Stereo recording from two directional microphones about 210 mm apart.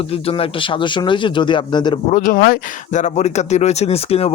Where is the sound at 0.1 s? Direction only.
25° left (ahead or behind).